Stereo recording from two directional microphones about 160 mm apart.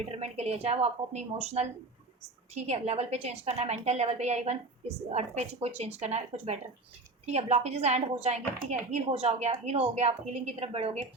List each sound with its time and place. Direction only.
0.0 s a woman's voice: 40° right (ahead or behind)